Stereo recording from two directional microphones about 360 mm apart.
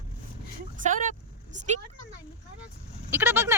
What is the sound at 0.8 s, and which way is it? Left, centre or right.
Speech, right.